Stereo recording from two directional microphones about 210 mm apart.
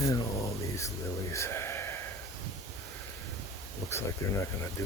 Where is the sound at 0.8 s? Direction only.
15° left (ahead or behind).